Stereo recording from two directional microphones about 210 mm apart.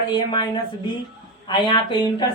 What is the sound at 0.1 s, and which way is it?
Speech, 20° left (ahead or behind).